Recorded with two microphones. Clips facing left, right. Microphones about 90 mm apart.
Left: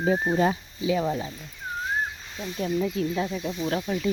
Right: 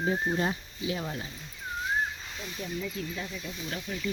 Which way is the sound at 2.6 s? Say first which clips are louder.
Left 10 dB; 55° left (ahead or behind).